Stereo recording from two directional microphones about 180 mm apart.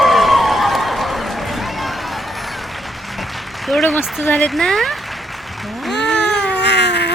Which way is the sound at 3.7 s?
Centre (ahead or behind).